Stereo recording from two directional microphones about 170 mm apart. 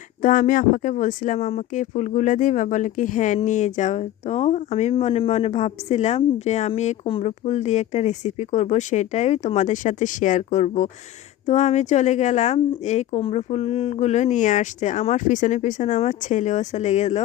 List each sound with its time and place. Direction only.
0.2 s speech: 50° left (ahead or behind)